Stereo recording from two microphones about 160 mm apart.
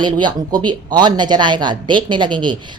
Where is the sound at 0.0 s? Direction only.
30° right (ahead or behind).